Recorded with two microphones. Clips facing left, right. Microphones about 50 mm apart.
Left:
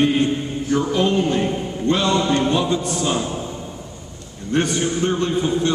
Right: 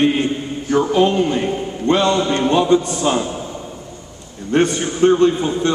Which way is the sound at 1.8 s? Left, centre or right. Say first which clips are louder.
Right 3 dB; right.